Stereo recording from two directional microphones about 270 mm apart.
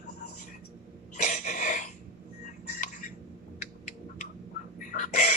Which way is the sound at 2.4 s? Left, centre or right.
Left.